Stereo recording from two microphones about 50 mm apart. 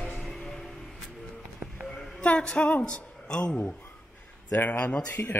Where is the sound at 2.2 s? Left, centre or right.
Left.